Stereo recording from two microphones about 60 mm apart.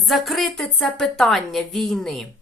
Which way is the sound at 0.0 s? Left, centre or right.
Centre.